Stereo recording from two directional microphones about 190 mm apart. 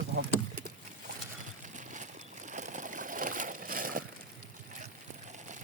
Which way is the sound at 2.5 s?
40° right (ahead or behind).